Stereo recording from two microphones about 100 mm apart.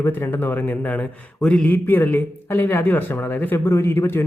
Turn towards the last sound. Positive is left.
turn(degrees=20)  # may be behind; listen again after turning